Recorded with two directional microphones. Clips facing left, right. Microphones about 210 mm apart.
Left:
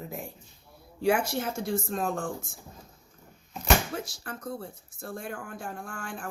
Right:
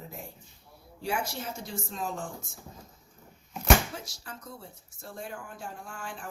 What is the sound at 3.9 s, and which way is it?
Speech, 55° left (ahead or behind).